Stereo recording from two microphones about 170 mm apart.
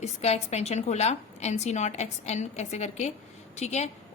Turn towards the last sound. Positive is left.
turn(degrees=40)  # may be behind; listen again after turning